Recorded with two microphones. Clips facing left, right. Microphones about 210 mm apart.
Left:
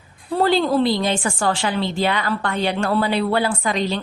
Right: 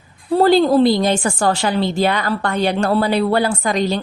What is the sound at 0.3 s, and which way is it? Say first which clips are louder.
A woman's voice: right 5 dB; 40° right (ahead or behind).